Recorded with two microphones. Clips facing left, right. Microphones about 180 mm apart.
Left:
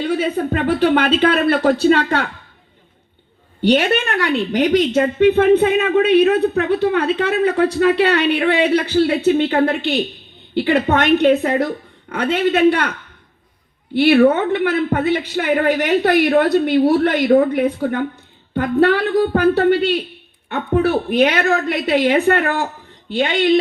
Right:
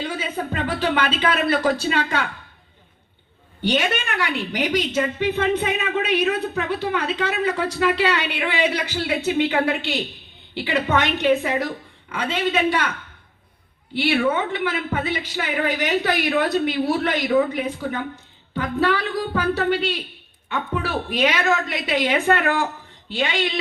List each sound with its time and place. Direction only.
0.0 s a woman's voice: 60° left (ahead or behind)
3.6 s a woman's voice: 60° left (ahead or behind)
13.9 s a woman's voice: 55° left (ahead or behind)